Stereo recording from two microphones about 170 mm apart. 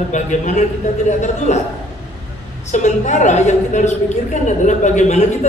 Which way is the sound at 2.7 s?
45° left (ahead or behind).